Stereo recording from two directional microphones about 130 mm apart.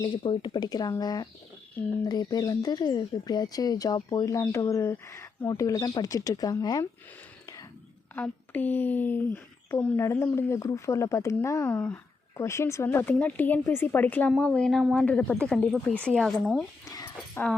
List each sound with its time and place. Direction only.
0.0 s speech: 40° left (ahead or behind)
8.1 s speech: 15° left (ahead or behind)
12.4 s speech: 20° left (ahead or behind); by 16.6 s centre (ahead or behind)
17.4 s speech: 20° left (ahead or behind)